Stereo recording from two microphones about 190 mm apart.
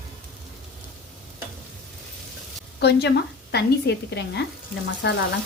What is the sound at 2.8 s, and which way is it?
A woman's voice, 60° left (ahead or behind).